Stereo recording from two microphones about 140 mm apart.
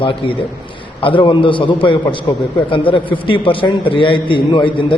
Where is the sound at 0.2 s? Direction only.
35° left (ahead or behind).